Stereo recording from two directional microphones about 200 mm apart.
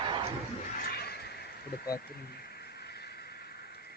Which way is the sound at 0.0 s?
25° right (ahead or behind).